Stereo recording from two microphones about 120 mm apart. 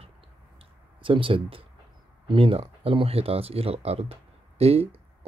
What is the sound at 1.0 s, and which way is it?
Speech, 45° right (ahead or behind).